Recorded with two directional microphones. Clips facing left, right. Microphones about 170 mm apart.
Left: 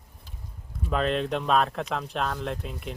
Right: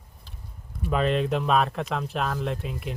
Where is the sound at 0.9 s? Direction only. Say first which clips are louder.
Right 2 dB; 5° right (ahead or behind).